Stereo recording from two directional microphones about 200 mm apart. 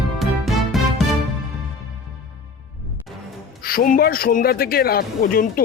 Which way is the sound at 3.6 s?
45° left (ahead or behind).